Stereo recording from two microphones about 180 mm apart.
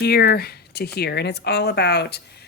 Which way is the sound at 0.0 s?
60° left (ahead or behind).